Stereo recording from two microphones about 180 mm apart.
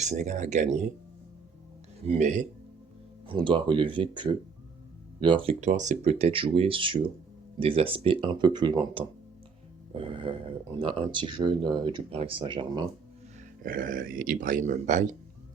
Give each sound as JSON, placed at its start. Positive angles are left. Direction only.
{"t": 0.0, "sound": "speech", "side_deg": -40}
{"t": 2.0, "sound": "speech", "side_deg": -40}
{"t": 3.2, "sound": "speech", "side_deg": -30}
{"t": 13.6, "sound": "speech", "side_deg": -50}